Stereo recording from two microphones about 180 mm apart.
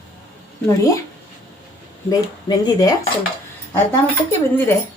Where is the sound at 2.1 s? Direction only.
20° left (ahead or behind).